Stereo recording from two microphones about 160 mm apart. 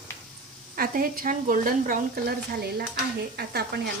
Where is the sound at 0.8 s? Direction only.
65° right (ahead or behind).